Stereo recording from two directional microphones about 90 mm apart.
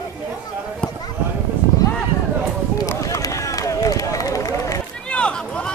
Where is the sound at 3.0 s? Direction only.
35° left (ahead or behind).